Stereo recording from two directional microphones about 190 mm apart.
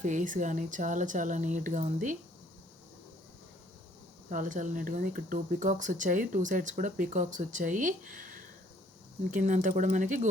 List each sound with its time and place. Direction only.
0.0 s speech: 40° right (ahead or behind)
4.3 s speech: 45° right (ahead or behind)